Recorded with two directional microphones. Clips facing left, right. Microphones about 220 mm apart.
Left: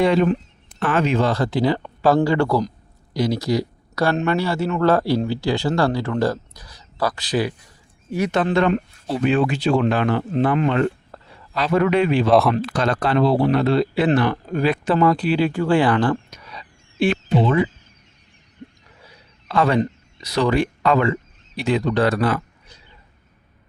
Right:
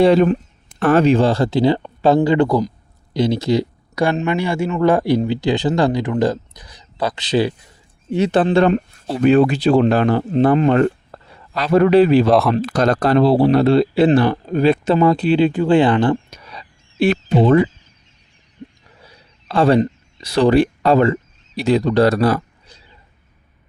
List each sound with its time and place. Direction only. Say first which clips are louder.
0.0 s speech: right 5 dB; 40° right (ahead or behind); by 2.7 s 15° right (ahead or behind)
3.1 s speech: right 4 dB; 25° right (ahead or behind); by 10.9 s 45° right (ahead or behind)
11.1 s a sound: right 2 dB; 40° right (ahead or behind)
11.5 s speech: right 6 dB; 35° right (ahead or behind)
12.3 s speech: right 1 dB; centre (ahead or behind)
12.6 s speech: right 5 dB; 40° right (ahead or behind)
18.6 s a sound: right 3 dB; 20° right (ahead or behind)
19.5 s speech: right 4 dB; 30° right (ahead or behind)